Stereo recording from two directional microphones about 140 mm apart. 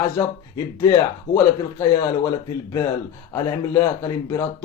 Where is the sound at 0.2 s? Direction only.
25° left (ahead or behind).